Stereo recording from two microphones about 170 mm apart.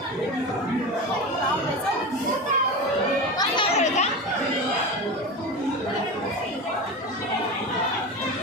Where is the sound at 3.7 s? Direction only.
40° left (ahead or behind).